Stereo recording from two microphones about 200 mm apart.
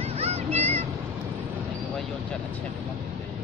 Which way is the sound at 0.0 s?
30° right (ahead or behind).